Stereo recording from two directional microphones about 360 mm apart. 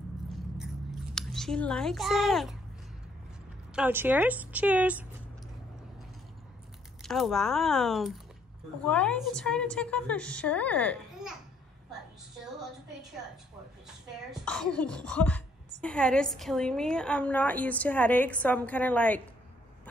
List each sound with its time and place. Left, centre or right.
0.3 s a sound: centre
3.7 s speech: centre
7.0 s speech: centre
14.4 s speech: centre